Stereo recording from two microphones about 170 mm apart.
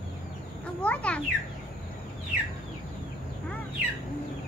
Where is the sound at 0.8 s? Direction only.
5° left (ahead or behind).